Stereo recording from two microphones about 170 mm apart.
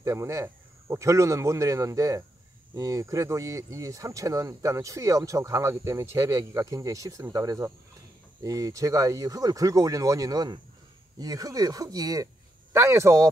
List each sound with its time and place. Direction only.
0.0 s a man's voice: 15° right (ahead or behind)